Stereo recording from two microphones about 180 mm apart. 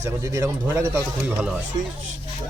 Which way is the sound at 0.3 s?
20° right (ahead or behind).